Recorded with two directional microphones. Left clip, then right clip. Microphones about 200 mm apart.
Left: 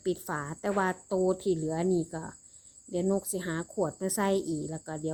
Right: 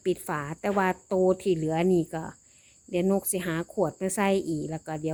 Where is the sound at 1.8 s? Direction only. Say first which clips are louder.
Right 4 dB; 60° right (ahead or behind).